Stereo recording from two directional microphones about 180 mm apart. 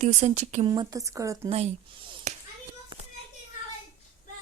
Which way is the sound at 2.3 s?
40° right (ahead or behind).